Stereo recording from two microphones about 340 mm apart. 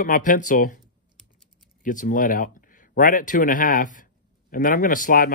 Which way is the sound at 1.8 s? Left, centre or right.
Left.